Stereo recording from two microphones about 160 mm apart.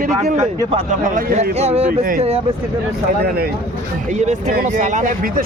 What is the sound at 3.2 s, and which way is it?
Speech, 70° right (ahead or behind).